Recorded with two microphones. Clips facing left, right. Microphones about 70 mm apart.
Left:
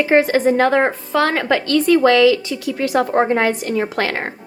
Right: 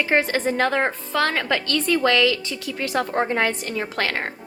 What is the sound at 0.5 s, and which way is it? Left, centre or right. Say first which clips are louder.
A woman's voice: left 6 dB; left.